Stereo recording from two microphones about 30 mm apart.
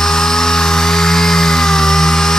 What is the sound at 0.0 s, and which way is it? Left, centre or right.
Chainsaw, centre.